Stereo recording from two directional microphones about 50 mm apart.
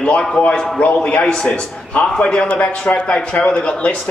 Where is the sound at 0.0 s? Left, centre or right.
Left.